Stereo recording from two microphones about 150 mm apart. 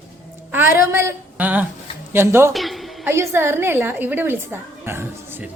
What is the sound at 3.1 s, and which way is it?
A woman's voice, 15° right (ahead or behind).